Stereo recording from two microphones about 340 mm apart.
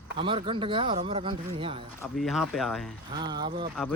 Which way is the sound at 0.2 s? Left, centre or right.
Centre.